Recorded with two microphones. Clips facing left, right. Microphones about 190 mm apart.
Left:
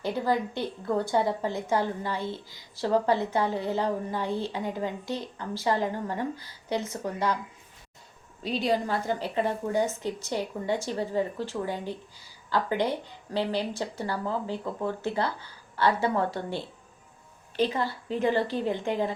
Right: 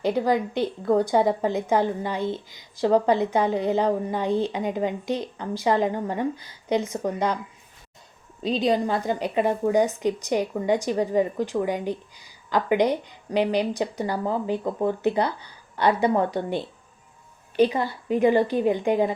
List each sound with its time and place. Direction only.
0.0 s a woman's voice: 20° right (ahead or behind)
8.4 s a woman's voice: 20° right (ahead or behind)